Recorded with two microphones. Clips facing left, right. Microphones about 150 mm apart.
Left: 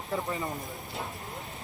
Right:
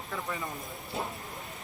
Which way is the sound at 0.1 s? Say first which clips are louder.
Left 5 dB; 25° left (ahead or behind).